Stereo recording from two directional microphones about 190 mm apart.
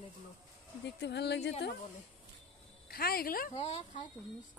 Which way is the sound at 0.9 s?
60° left (ahead or behind).